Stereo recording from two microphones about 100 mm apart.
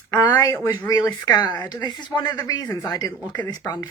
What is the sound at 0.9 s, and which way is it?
Speech, 35° left (ahead or behind).